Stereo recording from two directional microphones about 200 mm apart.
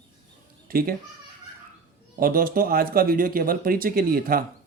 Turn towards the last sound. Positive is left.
turn(degrees=-45)  # may be behind; listen again after turning